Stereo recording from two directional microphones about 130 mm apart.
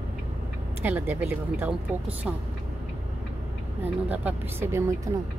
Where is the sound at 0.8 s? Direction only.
15° right (ahead or behind).